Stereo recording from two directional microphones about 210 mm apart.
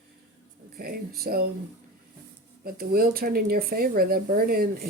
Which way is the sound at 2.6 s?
45° right (ahead or behind).